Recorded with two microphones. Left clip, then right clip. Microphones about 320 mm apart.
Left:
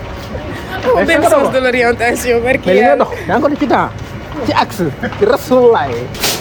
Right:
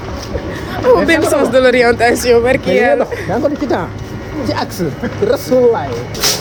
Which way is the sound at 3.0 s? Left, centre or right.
Left.